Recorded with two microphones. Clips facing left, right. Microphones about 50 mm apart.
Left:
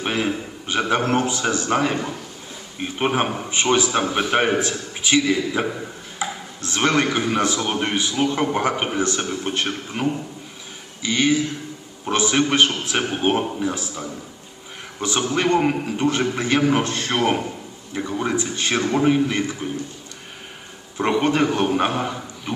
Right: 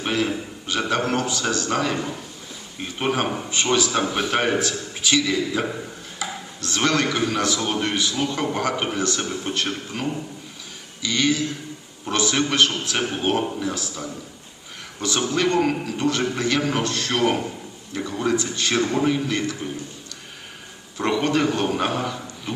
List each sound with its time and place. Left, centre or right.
0.0 s a man's voice: centre
21.0 s a man's voice: left